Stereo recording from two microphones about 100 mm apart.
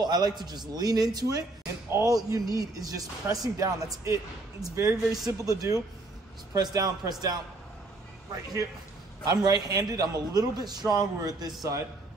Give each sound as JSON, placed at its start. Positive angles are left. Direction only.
{"t": 0.0, "sound": "speech", "side_deg": -45}
{"t": 1.9, "sound": "speech", "side_deg": -25}
{"t": 2.1, "sound": "speech", "side_deg": -35}
{"t": 9.3, "sound": "speech", "side_deg": -40}